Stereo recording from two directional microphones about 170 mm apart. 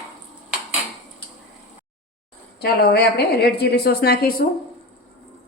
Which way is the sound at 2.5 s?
65° left (ahead or behind).